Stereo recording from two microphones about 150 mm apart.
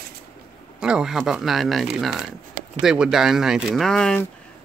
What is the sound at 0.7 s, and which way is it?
Speech, 5° right (ahead or behind).